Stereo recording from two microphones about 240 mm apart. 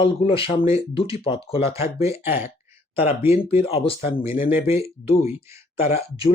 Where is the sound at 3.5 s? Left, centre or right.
Left.